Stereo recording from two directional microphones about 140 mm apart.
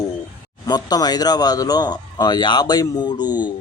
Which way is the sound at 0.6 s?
30° left (ahead or behind).